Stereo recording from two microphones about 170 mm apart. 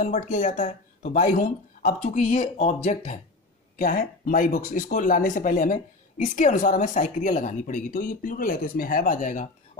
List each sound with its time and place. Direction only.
0.0 s speech: 45° left (ahead or behind)